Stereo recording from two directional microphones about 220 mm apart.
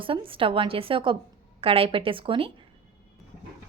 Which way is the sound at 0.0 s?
25° right (ahead or behind).